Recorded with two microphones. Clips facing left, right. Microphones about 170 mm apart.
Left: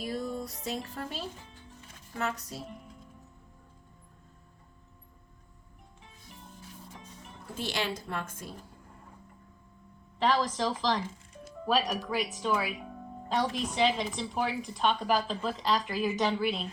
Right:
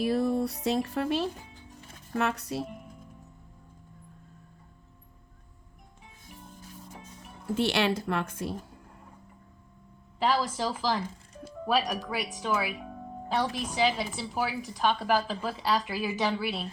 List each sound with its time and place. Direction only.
0.0 s speech: 70° right (ahead or behind)
7.5 s speech: 70° right (ahead or behind)
10.2 s a woman's voice: 10° right (ahead or behind)